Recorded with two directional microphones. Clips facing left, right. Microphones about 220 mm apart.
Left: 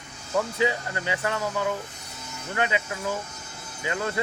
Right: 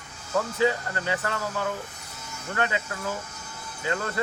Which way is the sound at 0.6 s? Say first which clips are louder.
Right 1 dB; 15° left (ahead or behind).